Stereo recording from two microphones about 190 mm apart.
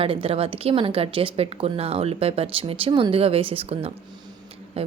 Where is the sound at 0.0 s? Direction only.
30° right (ahead or behind).